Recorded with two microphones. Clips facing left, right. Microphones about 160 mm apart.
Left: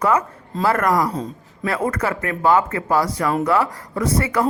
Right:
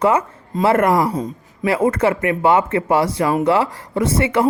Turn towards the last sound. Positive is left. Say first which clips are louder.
# right 3 dB
turn(degrees=-25)  # may be behind; listen again after turning